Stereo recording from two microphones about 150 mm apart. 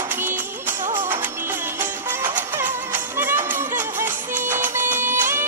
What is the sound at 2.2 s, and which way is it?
Music, 10° right (ahead or behind).